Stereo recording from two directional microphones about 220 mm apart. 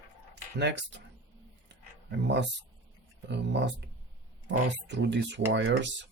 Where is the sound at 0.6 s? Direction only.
50° right (ahead or behind).